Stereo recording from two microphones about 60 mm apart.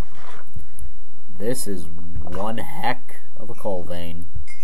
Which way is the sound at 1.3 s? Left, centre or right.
Centre.